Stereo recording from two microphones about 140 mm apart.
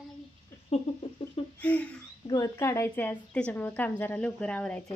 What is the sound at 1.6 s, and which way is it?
Speech, 10° left (ahead or behind).